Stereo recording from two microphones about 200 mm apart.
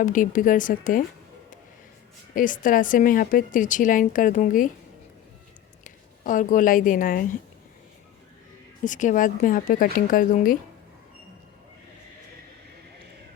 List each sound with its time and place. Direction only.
0.0 s a woman's voice: 40° left (ahead or behind)
2.3 s a woman's voice: 40° left (ahead or behind)
5.8 s speech: 40° left (ahead or behind)
8.8 s a woman's voice: 40° left (ahead or behind)